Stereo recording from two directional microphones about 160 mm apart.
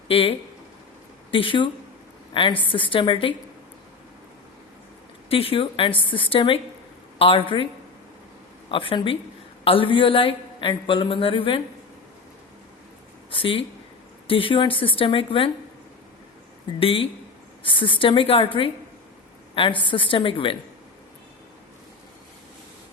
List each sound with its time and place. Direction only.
0.1 s a man's voice: 35° left (ahead or behind)
5.3 s a man's voice: 35° left (ahead or behind)
8.7 s a man's voice: 35° left (ahead or behind)
13.3 s a man's voice: 35° left (ahead or behind)
16.8 s a man's voice: 35° left (ahead or behind)
19.5 s a man's voice: 35° left (ahead or behind)